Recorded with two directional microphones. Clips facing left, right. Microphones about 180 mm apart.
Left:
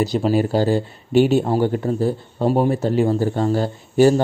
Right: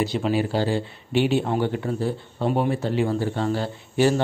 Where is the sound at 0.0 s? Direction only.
40° left (ahead or behind).